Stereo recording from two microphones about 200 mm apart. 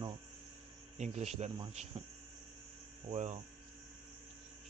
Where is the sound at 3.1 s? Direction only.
35° right (ahead or behind).